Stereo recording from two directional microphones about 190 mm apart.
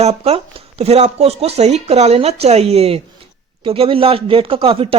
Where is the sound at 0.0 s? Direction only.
35° right (ahead or behind).